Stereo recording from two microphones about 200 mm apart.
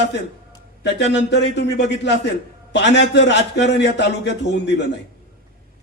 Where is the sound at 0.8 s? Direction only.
60° left (ahead or behind).